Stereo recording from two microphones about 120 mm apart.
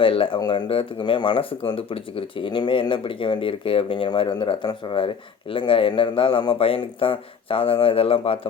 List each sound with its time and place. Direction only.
0.0 s speech: 45° left (ahead or behind)